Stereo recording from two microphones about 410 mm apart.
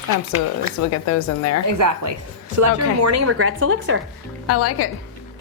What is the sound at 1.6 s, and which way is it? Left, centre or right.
A woman's voice, right.